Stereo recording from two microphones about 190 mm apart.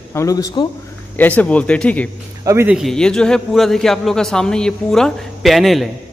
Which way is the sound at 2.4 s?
10° right (ahead or behind).